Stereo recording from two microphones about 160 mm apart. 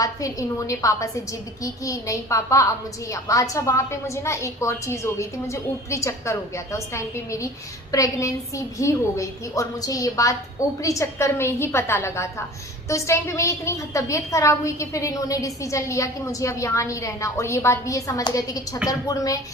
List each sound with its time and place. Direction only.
0.0 s a woman's voice: 20° left (ahead or behind)